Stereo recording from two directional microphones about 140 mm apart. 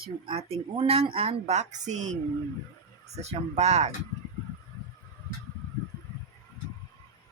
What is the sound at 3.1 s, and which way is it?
Speech, 50° right (ahead or behind).